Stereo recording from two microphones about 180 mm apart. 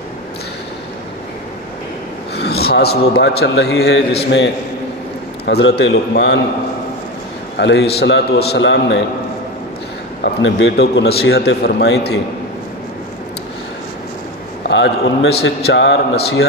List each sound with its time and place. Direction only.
2.3 s a man's voice: 65° left (ahead or behind)
5.4 s a man's voice: 70° left (ahead or behind)
7.5 s a man's voice: 70° left (ahead or behind); by 9.0 s 90° left
10.4 s a man's voice: 90° left; by 12.2 s 75° left (ahead or behind)
14.7 s a man's voice: 80° left